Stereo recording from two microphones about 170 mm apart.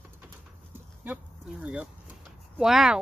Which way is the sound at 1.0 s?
5° right (ahead or behind).